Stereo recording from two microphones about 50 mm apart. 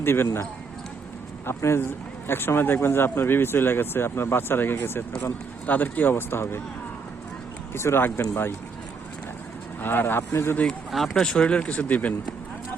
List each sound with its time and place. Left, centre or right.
0.0 s speech: left
1.5 s speech: left
5.6 s speech: left
7.7 s speech: left
8.1 s speech: left
9.8 s speech: left
10.9 s speech: centre
11.4 s speech: left